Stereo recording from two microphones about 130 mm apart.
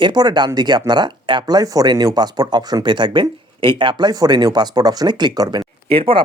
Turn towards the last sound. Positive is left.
turn(degrees=-45)  # may be behind; listen again after turning